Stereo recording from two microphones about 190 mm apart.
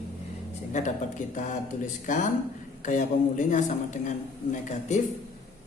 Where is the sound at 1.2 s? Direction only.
40° left (ahead or behind).